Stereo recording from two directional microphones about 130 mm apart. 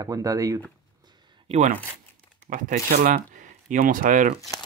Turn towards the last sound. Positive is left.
turn(degrees=-90)